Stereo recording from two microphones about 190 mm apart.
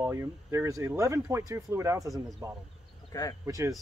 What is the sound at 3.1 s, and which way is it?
Speech, 20° left (ahead or behind).